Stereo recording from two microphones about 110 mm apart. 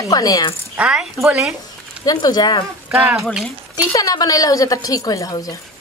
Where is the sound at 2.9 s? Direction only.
5° right (ahead or behind).